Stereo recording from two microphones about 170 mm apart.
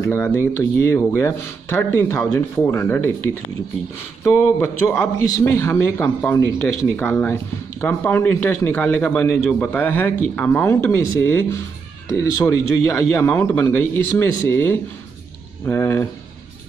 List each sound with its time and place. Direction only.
0.0 s a man's voice: 15° left (ahead or behind)
4.2 s a man's voice: 15° left (ahead or behind)